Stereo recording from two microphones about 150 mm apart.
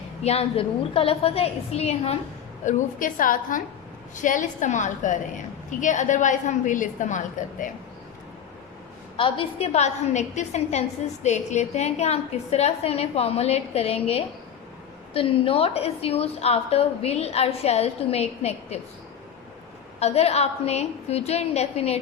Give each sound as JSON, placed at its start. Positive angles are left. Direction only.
{"t": 0.2, "sound": "a woman's voice", "side_deg": 45}
{"t": 2.6, "sound": "a woman's voice", "side_deg": 60}
{"t": 9.1, "sound": "a woman's voice", "side_deg": 35}
{"t": 20.0, "sound": "a woman's voice", "side_deg": 45}